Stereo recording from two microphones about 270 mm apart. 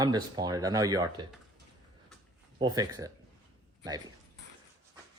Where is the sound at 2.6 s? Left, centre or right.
Centre.